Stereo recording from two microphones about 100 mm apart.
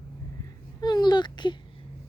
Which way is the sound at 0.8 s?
45° left (ahead or behind).